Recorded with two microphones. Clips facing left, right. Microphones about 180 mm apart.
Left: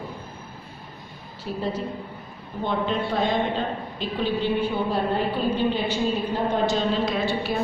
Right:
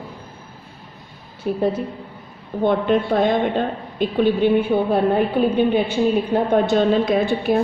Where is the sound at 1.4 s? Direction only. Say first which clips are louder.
Right 7 dB; 55° right (ahead or behind).